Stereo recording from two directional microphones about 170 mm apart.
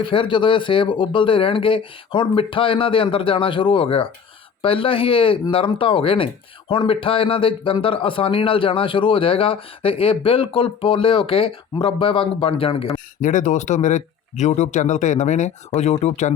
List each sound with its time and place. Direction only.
0.0 s speech: 30° left (ahead or behind)
13.2 s speech: 45° left (ahead or behind)